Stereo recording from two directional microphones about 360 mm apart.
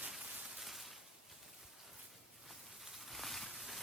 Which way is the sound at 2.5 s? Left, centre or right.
Centre.